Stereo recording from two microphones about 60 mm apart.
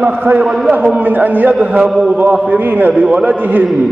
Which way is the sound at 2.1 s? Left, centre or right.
Right.